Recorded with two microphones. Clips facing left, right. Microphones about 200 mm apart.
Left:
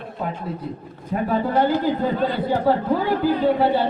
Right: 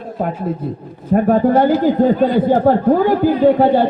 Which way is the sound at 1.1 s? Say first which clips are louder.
Right 8 dB; 50° right (ahead or behind).